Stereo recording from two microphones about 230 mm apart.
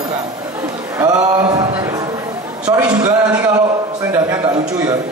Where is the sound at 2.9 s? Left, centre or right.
Centre.